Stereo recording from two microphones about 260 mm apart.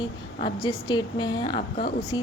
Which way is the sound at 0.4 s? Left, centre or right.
Centre.